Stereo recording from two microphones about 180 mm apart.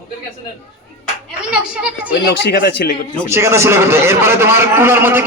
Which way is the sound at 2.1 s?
60° left (ahead or behind).